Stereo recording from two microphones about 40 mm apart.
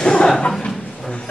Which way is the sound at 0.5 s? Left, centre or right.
Centre.